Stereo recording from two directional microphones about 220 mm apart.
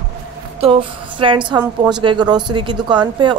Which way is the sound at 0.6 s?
25° right (ahead or behind).